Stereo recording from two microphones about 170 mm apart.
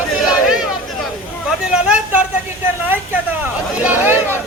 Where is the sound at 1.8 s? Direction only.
10° right (ahead or behind).